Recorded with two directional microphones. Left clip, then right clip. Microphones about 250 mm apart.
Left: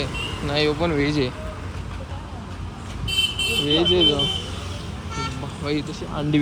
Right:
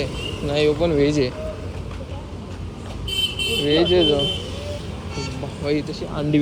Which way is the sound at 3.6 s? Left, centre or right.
Centre.